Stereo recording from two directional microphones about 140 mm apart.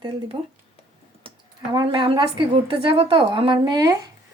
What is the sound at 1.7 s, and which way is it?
A woman's voice, 35° right (ahead or behind).